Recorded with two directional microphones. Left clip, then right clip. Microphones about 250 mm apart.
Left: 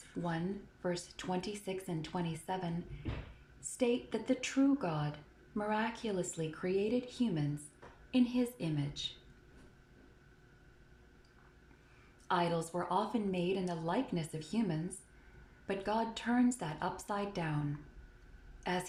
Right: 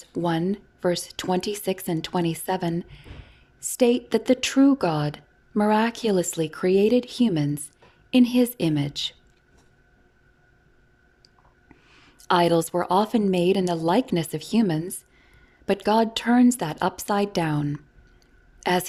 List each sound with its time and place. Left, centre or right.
0.1 s a woman's voice: right
3.8 s a woman's voice: right
12.3 s a woman's voice: right